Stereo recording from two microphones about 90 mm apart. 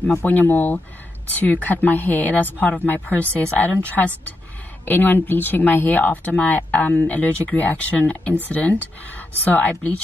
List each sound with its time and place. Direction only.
0.2 s speech: 20° left (ahead or behind)